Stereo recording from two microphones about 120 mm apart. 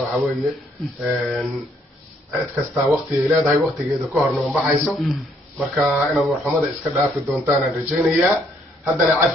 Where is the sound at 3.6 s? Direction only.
Centre (ahead or behind).